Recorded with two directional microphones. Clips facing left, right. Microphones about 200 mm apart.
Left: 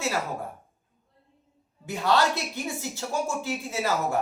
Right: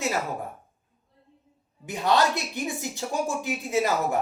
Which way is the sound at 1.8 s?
15° right (ahead or behind).